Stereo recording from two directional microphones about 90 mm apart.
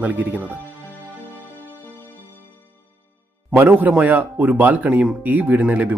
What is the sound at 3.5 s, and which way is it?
Speech, 25° right (ahead or behind).